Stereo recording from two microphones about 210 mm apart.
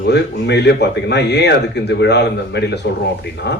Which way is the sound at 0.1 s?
55° left (ahead or behind).